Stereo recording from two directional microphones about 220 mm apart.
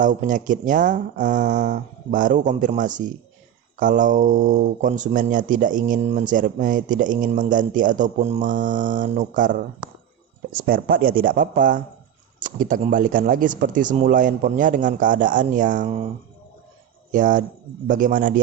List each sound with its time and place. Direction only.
0.0 s speech: 35° right (ahead or behind)
17.1 s speech: 35° right (ahead or behind)